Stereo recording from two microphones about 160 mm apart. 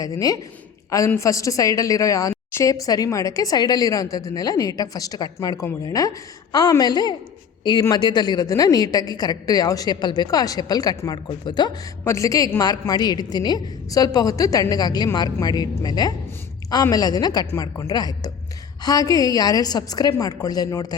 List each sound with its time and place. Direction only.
0.0 s a woman's voice: 20° left (ahead or behind)